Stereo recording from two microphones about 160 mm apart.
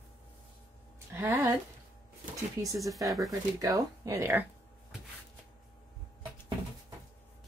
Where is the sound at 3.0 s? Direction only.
Centre (ahead or behind).